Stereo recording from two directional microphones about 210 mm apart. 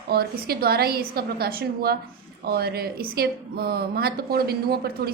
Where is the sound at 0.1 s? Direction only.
45° right (ahead or behind).